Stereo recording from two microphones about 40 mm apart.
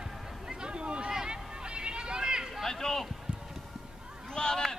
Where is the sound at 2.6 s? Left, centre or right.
Centre.